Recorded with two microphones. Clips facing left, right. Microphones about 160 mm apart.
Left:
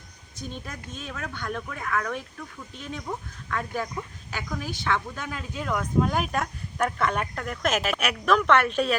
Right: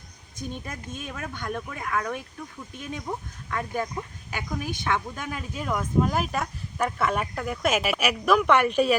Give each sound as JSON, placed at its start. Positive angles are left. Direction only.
{"t": 0.9, "sound": "speech", "side_deg": -15}